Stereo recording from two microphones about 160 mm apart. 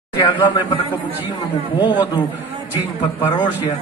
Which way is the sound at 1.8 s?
30° left (ahead or behind).